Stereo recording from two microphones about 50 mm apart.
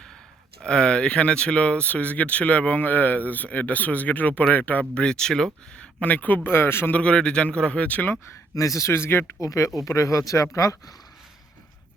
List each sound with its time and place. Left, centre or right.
0.6 s speech: left
4.9 s speech: centre
6.0 s speech: left
6.9 s a man's voice: left
8.5 s speech: left
9.6 s speech: left